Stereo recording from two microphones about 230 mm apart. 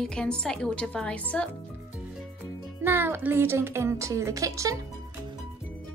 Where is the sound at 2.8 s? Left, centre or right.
Centre.